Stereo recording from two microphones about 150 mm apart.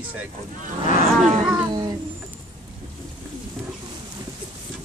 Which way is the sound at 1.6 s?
25° right (ahead or behind).